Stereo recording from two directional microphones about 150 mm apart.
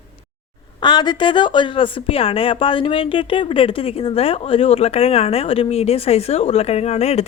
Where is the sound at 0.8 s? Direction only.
30° left (ahead or behind).